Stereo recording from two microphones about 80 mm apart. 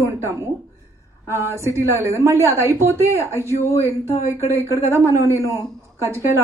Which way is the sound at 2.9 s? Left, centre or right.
Left.